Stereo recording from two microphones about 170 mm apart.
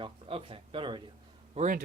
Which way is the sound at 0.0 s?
35° right (ahead or behind).